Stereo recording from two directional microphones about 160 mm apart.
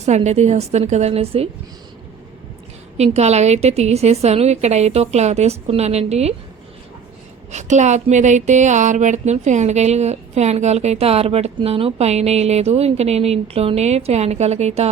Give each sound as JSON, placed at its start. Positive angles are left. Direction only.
{"t": 0.0, "sound": "speech", "side_deg": -45}
{"t": 3.0, "sound": "speech", "side_deg": -45}
{"t": 7.5, "sound": "speech", "side_deg": -45}